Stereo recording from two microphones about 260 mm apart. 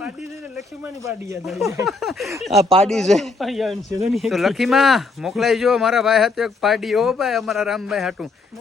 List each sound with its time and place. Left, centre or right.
1.9 s speech: centre
2.6 s speech: right
2.8 s speech: centre